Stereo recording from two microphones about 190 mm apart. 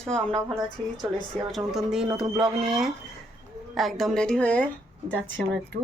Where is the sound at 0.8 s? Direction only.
30° right (ahead or behind).